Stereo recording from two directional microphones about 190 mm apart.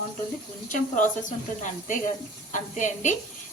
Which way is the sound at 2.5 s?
40° left (ahead or behind).